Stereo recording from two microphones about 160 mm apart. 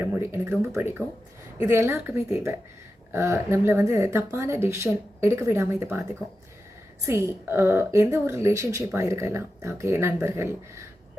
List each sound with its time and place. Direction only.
0.0 s a woman's voice: 15° right (ahead or behind)
7.1 s a woman's voice: 15° right (ahead or behind)